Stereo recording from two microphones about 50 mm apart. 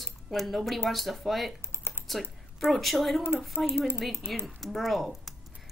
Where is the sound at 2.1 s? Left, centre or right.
Centre.